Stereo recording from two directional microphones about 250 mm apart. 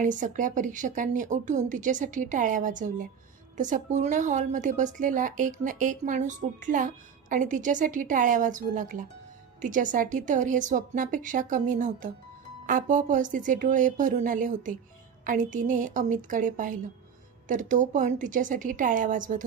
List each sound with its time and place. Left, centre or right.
0.0 s a woman's voice: right